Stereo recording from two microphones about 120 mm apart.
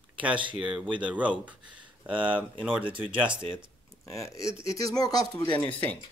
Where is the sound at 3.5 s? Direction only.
60° right (ahead or behind).